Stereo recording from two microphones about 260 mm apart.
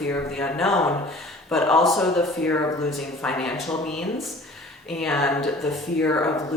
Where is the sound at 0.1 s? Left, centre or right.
Centre.